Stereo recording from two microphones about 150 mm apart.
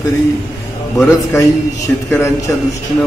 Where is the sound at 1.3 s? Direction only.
20° left (ahead or behind).